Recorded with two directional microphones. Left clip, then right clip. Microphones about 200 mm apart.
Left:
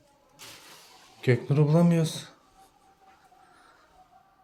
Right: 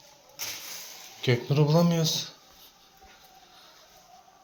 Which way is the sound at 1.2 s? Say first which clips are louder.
Even; 35° left (ahead or behind).